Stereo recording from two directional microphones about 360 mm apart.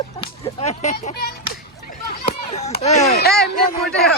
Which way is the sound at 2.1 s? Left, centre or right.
Centre.